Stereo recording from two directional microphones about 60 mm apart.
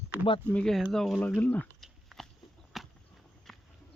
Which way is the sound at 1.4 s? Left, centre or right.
Left.